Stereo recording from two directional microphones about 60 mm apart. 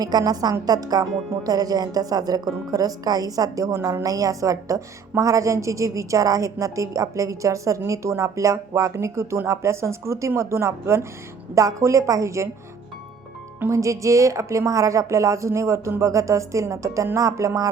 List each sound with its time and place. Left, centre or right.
0.0 s a woman's voice: right
4.0 s a woman's voice: right
13.7 s a woman's voice: right